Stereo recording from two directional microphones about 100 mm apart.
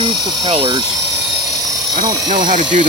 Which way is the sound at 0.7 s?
35° right (ahead or behind).